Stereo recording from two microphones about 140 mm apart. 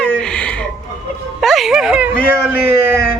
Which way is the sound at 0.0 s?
5° left (ahead or behind).